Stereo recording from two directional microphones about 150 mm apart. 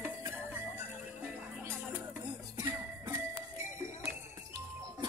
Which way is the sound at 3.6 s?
15° right (ahead or behind).